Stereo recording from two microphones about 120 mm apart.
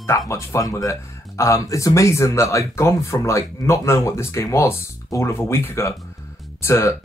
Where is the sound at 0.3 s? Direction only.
25° left (ahead or behind).